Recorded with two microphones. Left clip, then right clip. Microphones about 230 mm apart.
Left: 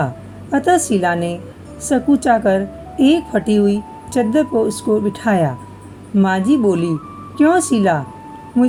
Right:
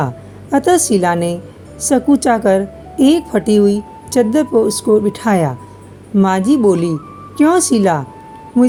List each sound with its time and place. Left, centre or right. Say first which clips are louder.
0.5 s a woman's voice: right 2 dB; right